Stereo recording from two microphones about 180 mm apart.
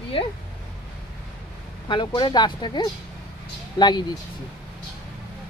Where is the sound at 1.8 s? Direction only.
25° left (ahead or behind).